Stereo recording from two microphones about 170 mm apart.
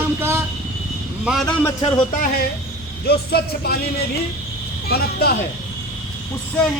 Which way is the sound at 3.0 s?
70° left (ahead or behind).